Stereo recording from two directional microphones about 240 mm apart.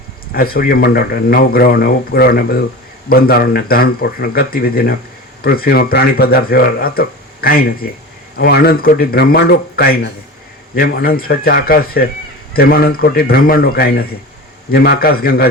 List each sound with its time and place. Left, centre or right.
0.3 s speech: left